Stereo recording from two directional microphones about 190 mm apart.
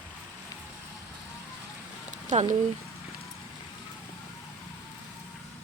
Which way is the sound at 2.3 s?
35° right (ahead or behind).